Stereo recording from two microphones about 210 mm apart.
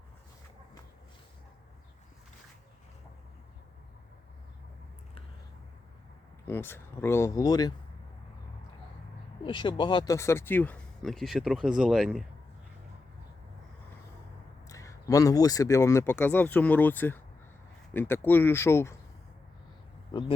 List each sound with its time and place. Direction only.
6.5 s speech: 10° left (ahead or behind)
9.4 s speech: 20° left (ahead or behind); by 12.2 s centre (ahead or behind)
14.7 s speech: 15° left (ahead or behind)
20.1 s speech: 25° left (ahead or behind)